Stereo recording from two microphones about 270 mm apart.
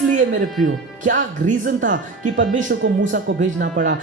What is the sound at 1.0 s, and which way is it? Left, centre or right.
Speech, right.